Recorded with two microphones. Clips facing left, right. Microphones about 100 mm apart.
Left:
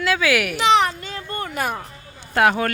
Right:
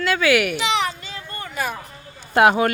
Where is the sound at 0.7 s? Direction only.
45° left (ahead or behind).